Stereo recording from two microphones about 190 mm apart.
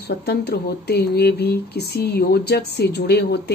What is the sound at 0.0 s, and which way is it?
Speech, 55° left (ahead or behind).